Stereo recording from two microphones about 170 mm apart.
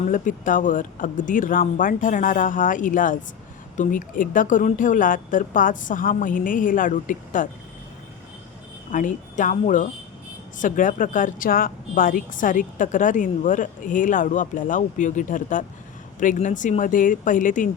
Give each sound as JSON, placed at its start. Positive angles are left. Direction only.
{"t": 0.1, "sound": "a woman's voice", "side_deg": 50}
{"t": 8.9, "sound": "a woman's voice", "side_deg": 50}